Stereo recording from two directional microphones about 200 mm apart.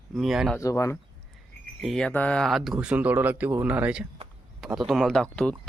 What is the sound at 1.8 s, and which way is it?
Speech, centre (ahead or behind).